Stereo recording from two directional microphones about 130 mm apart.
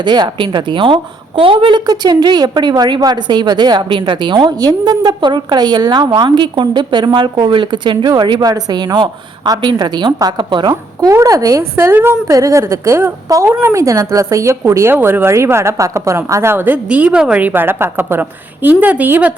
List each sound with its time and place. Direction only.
0.0 s a woman's voice: 35° right (ahead or behind); by 19.3 s 15° right (ahead or behind)